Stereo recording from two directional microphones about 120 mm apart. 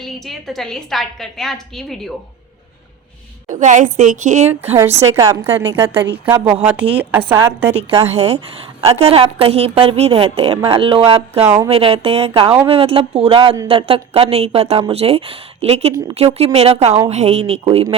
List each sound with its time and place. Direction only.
0.0 s a woman's voice: centre (ahead or behind)
3.5 s a woman's voice: 90° right; by 4.8 s 65° right (ahead or behind)
5.1 s a woman's voice: 25° right (ahead or behind)
7.8 s a woman's voice: 50° right (ahead or behind)